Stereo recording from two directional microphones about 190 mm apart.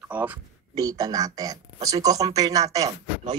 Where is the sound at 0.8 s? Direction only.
20° right (ahead or behind).